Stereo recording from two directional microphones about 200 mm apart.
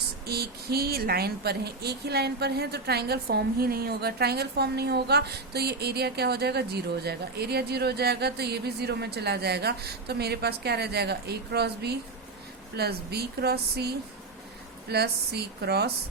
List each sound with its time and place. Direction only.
0.3 s speech: 50° right (ahead or behind)